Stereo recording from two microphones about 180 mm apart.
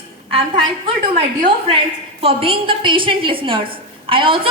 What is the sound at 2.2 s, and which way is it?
A woman's voice, 30° right (ahead or behind).